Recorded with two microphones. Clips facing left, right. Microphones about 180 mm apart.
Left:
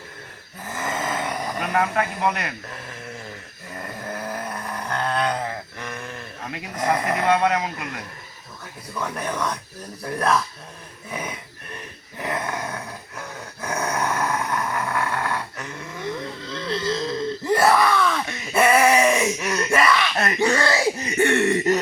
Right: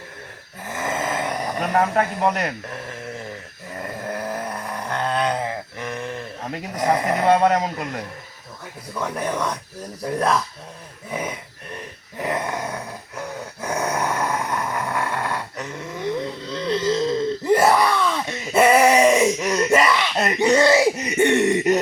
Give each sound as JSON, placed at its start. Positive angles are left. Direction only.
{"t": 0.7, "sound": "a sound", "side_deg": -10}
{"t": 1.5, "sound": "speech", "side_deg": -35}
{"t": 4.1, "sound": "vehicle", "side_deg": -10}
{"t": 4.9, "sound": "a sound", "side_deg": -15}
{"t": 7.2, "sound": "speech", "side_deg": -40}
{"t": 9.0, "sound": "speech", "side_deg": -10}
{"t": 11.1, "sound": "a sound", "side_deg": -15}
{"t": 12.2, "sound": "grunt", "side_deg": -15}
{"t": 13.6, "sound": "dog", "side_deg": -10}
{"t": 16.5, "sound": "wail", "side_deg": -15}
{"t": 17.4, "sound": "groan", "side_deg": -15}